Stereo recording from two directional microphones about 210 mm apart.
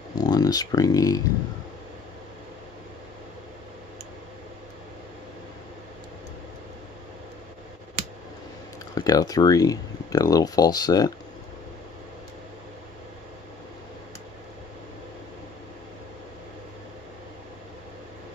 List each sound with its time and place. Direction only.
0.1 s speech: 20° left (ahead or behind)
8.9 s speech: 15° left (ahead or behind)